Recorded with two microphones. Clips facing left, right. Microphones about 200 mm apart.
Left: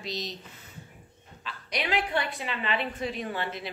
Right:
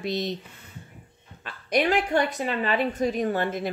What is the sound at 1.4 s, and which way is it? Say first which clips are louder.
Speech: right 10 dB; 50° right (ahead or behind).